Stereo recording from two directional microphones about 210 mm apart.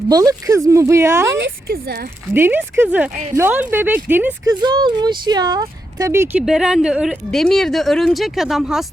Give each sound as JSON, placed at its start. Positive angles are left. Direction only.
{"t": 0.1, "sound": "speech", "side_deg": -20}
{"t": 1.4, "sound": "speech", "side_deg": -50}
{"t": 2.3, "sound": "speech", "side_deg": -10}
{"t": 4.6, "sound": "speech", "side_deg": -20}